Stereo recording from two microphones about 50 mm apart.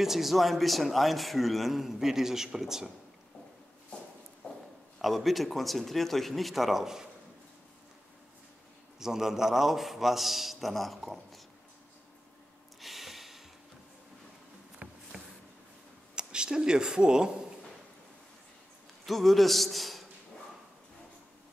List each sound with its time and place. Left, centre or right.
0.0 s a man's voice: centre
4.4 s a sound: centre
5.0 s a man's voice: centre
9.0 s a man's voice: centre
12.8 s snort: centre
14.8 s a sound: right
16.2 s speech: centre
19.0 s a man's voice: centre